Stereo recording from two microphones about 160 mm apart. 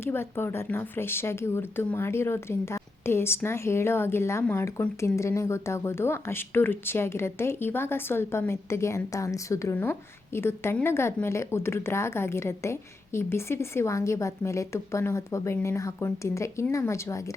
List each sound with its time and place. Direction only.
0.0 s speech: 15° left (ahead or behind)